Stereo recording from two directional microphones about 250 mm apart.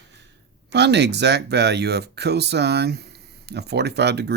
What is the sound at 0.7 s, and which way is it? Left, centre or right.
Speech, right.